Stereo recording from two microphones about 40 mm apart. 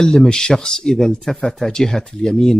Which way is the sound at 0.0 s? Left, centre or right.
Centre.